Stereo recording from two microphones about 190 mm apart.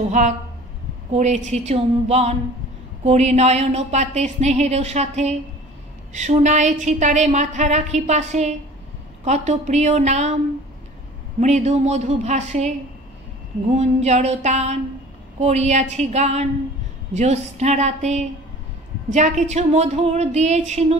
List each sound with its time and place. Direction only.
0.2 s a woman's voice: 35° right (ahead or behind)
11.3 s a woman's voice: 35° right (ahead or behind)